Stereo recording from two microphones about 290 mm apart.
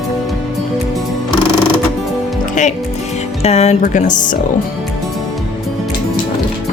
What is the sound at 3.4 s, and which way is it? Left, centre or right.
Speech, left.